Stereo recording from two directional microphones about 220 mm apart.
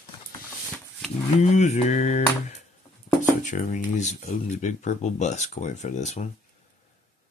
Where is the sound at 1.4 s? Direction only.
30° left (ahead or behind).